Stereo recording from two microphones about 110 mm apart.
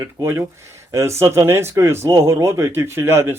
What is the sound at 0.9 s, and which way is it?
Speech, 25° right (ahead or behind).